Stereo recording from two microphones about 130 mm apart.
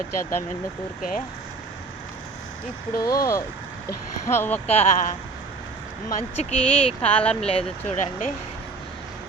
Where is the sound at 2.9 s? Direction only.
25° left (ahead or behind).